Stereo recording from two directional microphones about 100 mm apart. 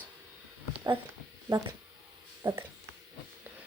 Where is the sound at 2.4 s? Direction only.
25° right (ahead or behind).